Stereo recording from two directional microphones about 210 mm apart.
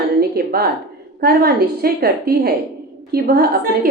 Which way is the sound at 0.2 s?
50° right (ahead or behind).